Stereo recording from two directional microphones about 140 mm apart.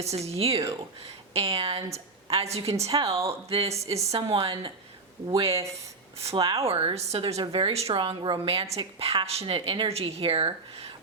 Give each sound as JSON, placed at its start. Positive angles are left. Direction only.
{"t": 0.0, "sound": "speech", "side_deg": -50}
{"t": 6.4, "sound": "speech", "side_deg": -25}
{"t": 6.7, "sound": "speech", "side_deg": -45}